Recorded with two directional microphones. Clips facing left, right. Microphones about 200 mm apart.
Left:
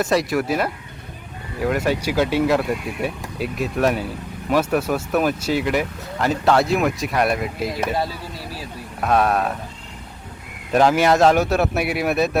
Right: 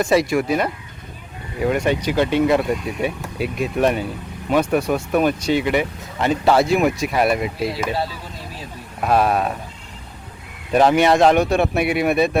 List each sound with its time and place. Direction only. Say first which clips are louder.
0.0 s speech: right 2 dB; centre (ahead or behind)
9.0 s speech: right 1 dB; centre (ahead or behind)
10.7 s speech: right 1 dB; centre (ahead or behind)